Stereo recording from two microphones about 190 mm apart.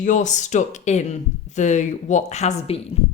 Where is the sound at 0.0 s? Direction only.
40° left (ahead or behind).